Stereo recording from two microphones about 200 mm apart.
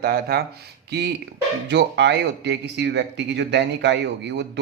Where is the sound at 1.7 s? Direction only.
60° right (ahead or behind).